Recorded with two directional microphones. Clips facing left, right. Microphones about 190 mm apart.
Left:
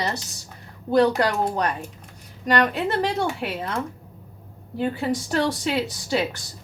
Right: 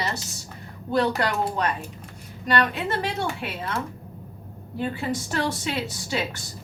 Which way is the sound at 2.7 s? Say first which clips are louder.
Left 4 dB; 35° left (ahead or behind).